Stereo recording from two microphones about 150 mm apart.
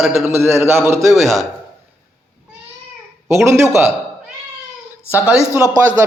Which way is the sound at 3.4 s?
15° right (ahead or behind).